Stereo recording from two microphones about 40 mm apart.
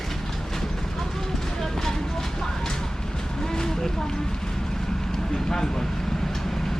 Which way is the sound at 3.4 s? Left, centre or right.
Centre.